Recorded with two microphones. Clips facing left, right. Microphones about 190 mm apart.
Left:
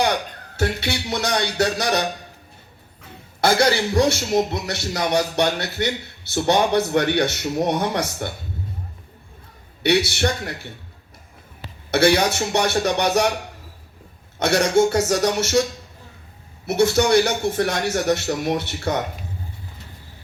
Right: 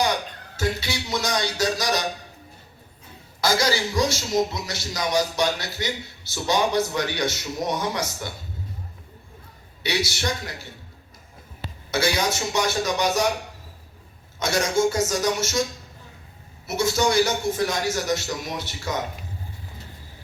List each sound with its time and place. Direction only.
0.0 s speech: 60° left (ahead or behind)
3.4 s a man's voice: 60° left (ahead or behind)
9.8 s a man's voice: 60° left (ahead or behind)
11.9 s a man's voice: 65° left (ahead or behind)
14.3 s a man's voice: 65° left (ahead or behind)
16.6 s a man's voice: 60° left (ahead or behind)